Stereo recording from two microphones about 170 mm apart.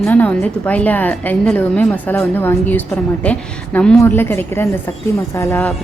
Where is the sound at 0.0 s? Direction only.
10° left (ahead or behind).